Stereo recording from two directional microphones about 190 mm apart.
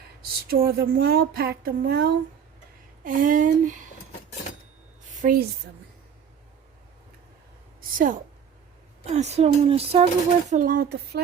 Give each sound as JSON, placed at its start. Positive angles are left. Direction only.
{"t": 0.5, "sound": "speech", "side_deg": -50}
{"t": 5.2, "sound": "speech", "side_deg": -50}
{"t": 7.8, "sound": "a sound", "side_deg": -45}
{"t": 9.0, "sound": "speech", "side_deg": -35}
{"t": 10.5, "sound": "speech", "side_deg": -45}